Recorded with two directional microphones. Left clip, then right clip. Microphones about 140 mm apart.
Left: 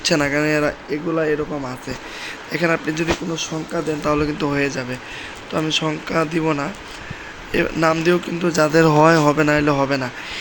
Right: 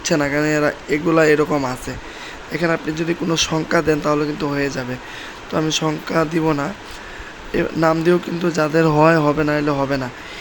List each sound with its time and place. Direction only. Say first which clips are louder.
0.0 s speech: even; 5° right (ahead or behind)
1.0 s speech: right 6 dB; 25° right (ahead or behind)
2.5 s speech: even; 10° right (ahead or behind)
3.5 s speech: right 7 dB; 20° right (ahead or behind)
4.0 s speech: even; 5° right (ahead or behind)
8.4 s speech: left 2 dB; centre (ahead or behind)